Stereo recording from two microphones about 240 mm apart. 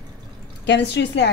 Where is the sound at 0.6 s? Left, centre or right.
Left.